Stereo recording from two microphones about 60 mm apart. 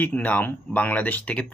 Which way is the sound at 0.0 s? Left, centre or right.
Left.